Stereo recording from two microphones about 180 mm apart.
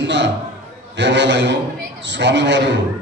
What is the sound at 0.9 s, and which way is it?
A man's voice, 80° right.